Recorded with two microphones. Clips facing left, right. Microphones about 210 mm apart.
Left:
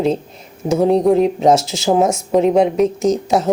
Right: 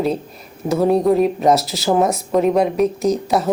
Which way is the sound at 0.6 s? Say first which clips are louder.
Left 2 dB; 20° left (ahead or behind).